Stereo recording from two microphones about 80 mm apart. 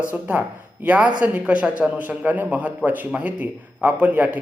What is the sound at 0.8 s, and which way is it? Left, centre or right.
A man's voice, centre.